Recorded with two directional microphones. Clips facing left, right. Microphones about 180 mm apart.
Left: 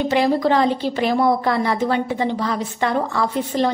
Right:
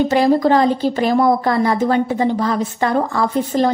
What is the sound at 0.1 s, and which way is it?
A woman's voice, 45° right (ahead or behind).